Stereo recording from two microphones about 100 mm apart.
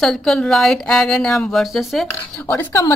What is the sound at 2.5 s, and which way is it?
Speech, 20° left (ahead or behind).